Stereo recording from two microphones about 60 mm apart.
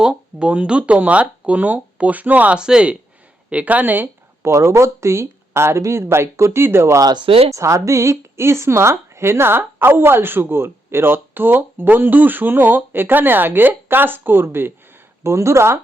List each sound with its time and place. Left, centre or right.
0.0 s speech: centre
3.5 s speech: right
4.4 s speech: right
7.5 s a woman's voice: right
15.2 s speech: right